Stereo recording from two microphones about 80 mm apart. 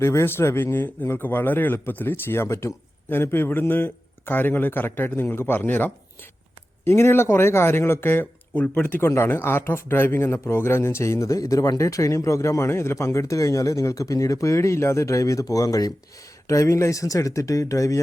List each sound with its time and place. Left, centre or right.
0.0 s speech: left